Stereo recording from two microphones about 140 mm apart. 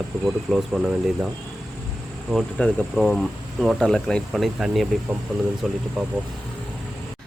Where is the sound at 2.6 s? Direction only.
10° left (ahead or behind).